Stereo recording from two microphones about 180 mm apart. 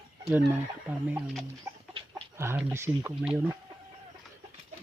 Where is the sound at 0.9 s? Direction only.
5° right (ahead or behind).